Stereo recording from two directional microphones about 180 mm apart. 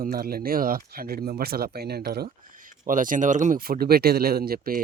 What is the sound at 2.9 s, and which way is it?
A man's voice, 45° right (ahead or behind).